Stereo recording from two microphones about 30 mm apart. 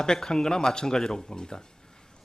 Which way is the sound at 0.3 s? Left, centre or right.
Left.